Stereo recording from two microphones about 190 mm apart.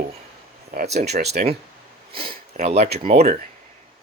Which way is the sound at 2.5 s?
35° right (ahead or behind).